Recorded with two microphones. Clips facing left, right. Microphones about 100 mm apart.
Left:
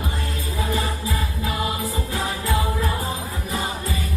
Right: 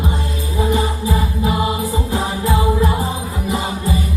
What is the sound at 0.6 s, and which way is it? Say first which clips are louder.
Music: right 7 dB; 20° right (ahead or behind).